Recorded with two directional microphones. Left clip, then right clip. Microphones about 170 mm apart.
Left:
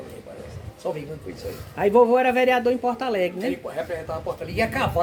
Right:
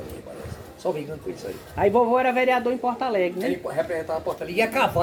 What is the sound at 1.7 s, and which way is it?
Speech, 55° left (ahead or behind).